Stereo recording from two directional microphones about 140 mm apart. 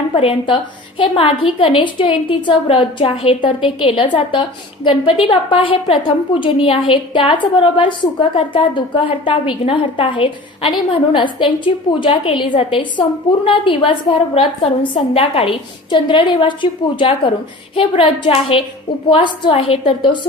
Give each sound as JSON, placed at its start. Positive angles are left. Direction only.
{"t": 0.1, "sound": "a woman's voice", "side_deg": 40}